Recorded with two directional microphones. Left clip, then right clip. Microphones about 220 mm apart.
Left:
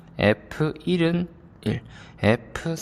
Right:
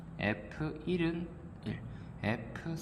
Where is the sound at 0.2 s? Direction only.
55° left (ahead or behind).